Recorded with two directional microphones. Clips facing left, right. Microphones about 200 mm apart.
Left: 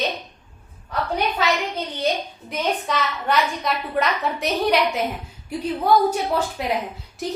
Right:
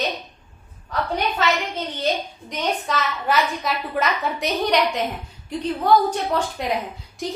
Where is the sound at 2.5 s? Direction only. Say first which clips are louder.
Left 1 dB; centre (ahead or behind).